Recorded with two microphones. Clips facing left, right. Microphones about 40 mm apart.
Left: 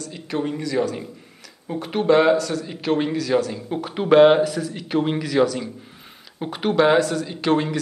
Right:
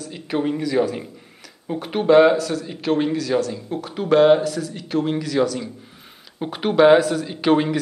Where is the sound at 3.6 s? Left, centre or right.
Centre.